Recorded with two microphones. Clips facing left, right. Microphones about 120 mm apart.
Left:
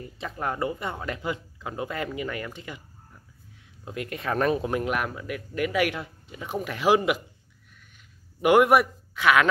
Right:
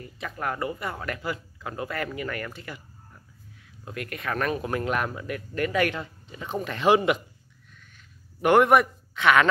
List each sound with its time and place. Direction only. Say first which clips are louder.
0.0 s speech: left 1 dB; 25° left (ahead or behind)
3.8 s speech: left 2 dB; 20° left (ahead or behind)
4.6 s speech: left 1 dB; 15° left (ahead or behind)
4.9 s speech: right 1 dB; 5° left (ahead or behind)
8.4 s speech: even; 10° left (ahead or behind)